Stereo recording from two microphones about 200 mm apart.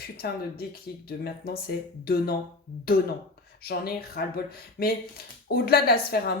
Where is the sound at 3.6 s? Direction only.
50° left (ahead or behind).